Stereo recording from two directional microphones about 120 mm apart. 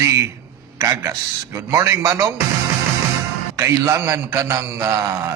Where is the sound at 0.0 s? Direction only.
25° right (ahead or behind).